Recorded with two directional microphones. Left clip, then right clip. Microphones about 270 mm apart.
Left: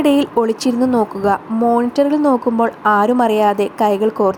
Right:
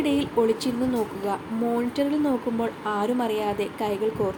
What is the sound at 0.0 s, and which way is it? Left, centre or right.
A woman's voice, left.